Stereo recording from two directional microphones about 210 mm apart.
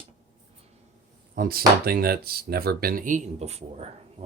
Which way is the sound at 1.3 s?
45° right (ahead or behind).